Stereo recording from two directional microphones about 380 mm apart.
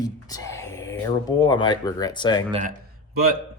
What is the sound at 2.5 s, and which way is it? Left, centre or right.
Speech, centre.